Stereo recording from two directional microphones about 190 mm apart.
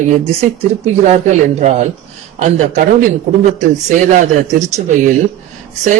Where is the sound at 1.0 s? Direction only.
40° right (ahead or behind).